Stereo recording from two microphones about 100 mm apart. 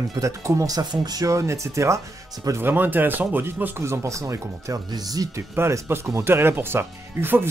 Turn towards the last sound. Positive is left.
turn(degrees=-20)  # may be behind; listen again after turning